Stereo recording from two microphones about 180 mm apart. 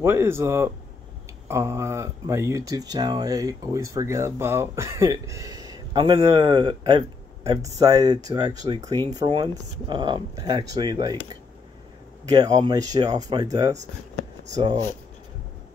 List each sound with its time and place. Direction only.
0.0 s speech: 15° right (ahead or behind)
12.3 s speech: 20° right (ahead or behind)